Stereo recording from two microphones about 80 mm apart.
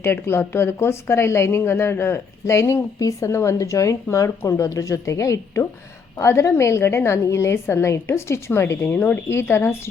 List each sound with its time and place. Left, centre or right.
0.0 s speech: left